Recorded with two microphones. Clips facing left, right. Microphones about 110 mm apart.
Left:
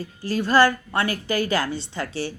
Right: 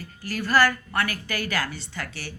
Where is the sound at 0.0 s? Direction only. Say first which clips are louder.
Left 6 dB; 25° left (ahead or behind).